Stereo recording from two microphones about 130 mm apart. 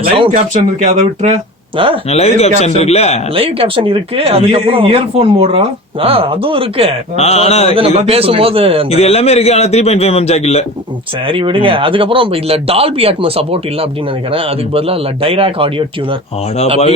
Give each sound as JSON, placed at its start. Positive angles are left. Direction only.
{"t": 0.8, "sound": "speech", "side_deg": -70}
{"t": 1.7, "sound": "speech", "side_deg": -45}
{"t": 2.0, "sound": "a man's voice", "side_deg": 55}
{"t": 3.3, "sound": "speech", "side_deg": -45}
{"t": 7.2, "sound": "a man's voice", "side_deg": 55}
{"t": 7.8, "sound": "speech", "side_deg": -50}
{"t": 8.9, "sound": "a man's voice", "side_deg": 55}
{"t": 11.3, "sound": "speech", "side_deg": -40}